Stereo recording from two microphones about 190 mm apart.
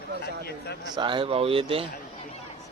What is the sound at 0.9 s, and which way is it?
Speech, 25° right (ahead or behind).